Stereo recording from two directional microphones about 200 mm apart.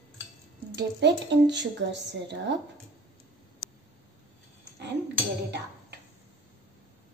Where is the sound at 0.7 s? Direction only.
60° right (ahead or behind).